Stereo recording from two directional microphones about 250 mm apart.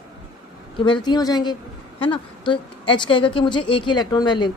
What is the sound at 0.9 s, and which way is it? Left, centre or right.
A woman's voice, centre.